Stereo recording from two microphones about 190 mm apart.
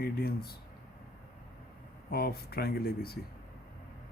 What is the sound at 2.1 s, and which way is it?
Speech, 55° left (ahead or behind).